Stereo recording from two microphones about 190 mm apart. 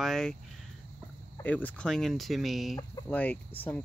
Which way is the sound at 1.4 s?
5° left (ahead or behind).